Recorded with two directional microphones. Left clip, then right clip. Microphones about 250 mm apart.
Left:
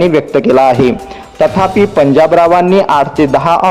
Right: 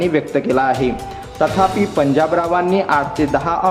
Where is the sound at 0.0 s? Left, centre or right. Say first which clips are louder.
Left 8 dB; left.